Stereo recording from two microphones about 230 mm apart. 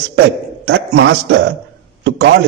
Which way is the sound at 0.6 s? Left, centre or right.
Right.